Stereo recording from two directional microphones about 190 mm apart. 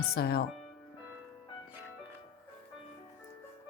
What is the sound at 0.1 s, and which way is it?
Speech, 55° left (ahead or behind).